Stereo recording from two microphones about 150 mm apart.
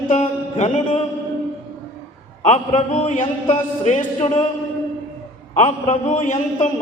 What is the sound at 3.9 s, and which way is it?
Speech, 55° left (ahead or behind).